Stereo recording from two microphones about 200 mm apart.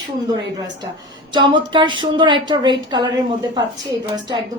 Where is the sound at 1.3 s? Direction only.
25° right (ahead or behind).